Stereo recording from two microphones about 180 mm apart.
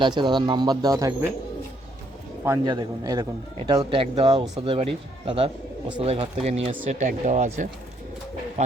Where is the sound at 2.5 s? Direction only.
25° right (ahead or behind).